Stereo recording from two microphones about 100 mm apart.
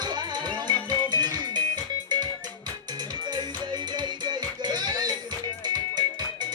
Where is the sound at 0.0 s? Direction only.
45° right (ahead or behind).